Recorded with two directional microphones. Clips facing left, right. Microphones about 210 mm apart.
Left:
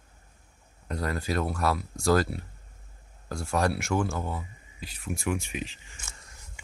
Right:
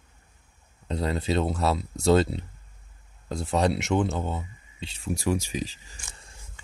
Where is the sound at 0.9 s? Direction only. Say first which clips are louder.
Right 4 dB; 25° right (ahead or behind).